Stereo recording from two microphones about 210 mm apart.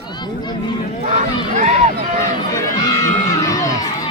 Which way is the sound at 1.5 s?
35° right (ahead or behind).